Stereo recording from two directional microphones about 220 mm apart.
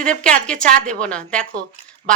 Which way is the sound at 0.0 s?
5° left (ahead or behind).